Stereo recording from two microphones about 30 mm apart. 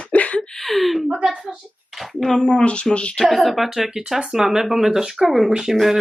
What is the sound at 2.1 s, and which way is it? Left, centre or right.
Speech, centre.